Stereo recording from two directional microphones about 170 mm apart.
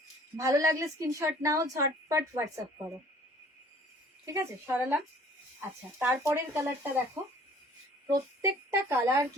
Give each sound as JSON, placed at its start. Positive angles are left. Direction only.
{"t": 0.3, "sound": "a woman's voice", "side_deg": -20}
{"t": 4.3, "sound": "speech", "side_deg": -15}
{"t": 6.0, "sound": "speech", "side_deg": -10}
{"t": 8.0, "sound": "speech", "side_deg": -15}